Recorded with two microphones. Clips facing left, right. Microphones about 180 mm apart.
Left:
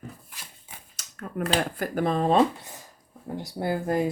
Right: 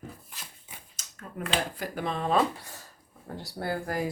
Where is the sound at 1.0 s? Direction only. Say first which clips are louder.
Left 2 dB; 65° left (ahead or behind).